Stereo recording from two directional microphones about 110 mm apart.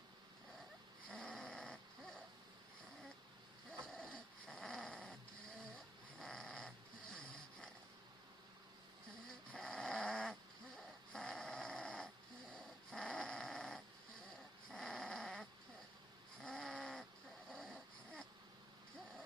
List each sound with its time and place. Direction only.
1.1 s snoring: 5° left (ahead or behind)
3.7 s dog: centre (ahead or behind)
5.7 s snoring: 5° left (ahead or behind)
9.5 s snoring: 5° left (ahead or behind)
12.5 s dog: 5° left (ahead or behind)
16.4 s snoring: 5° left (ahead or behind)
17.5 s dog: 5° left (ahead or behind)